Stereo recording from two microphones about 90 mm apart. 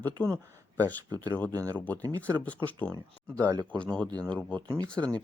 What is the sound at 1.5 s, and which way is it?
Speech, 40° right (ahead or behind).